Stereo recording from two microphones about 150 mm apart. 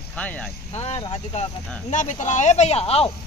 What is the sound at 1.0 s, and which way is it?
Speech, 30° left (ahead or behind).